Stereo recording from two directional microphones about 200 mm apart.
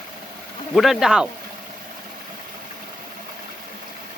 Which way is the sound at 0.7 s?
Centre (ahead or behind).